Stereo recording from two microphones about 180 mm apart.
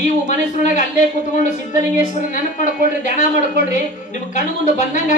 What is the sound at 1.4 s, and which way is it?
Speech, 45° left (ahead or behind).